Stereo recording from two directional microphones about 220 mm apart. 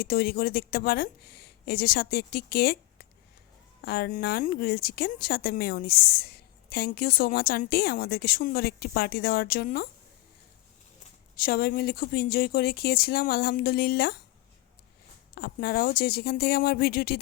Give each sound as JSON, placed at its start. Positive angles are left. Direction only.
{"t": 0.0, "sound": "speech", "side_deg": 45}
{"t": 11.3, "sound": "speech", "side_deg": 40}
{"t": 15.4, "sound": "speech", "side_deg": 45}